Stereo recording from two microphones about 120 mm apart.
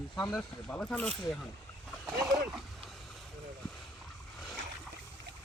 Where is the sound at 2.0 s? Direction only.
5° right (ahead or behind).